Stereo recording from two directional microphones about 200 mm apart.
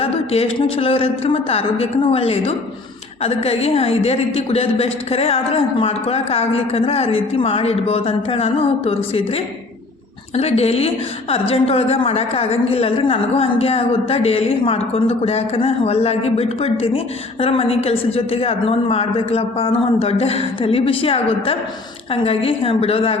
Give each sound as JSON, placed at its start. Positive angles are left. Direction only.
{"t": 0.0, "sound": "a sound", "side_deg": 30}
{"t": 0.8, "sound": "a woman's voice", "side_deg": 30}
{"t": 10.3, "sound": "a woman's voice", "side_deg": 30}